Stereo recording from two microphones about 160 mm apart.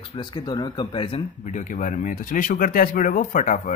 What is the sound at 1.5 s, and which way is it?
Speech, 55° left (ahead or behind).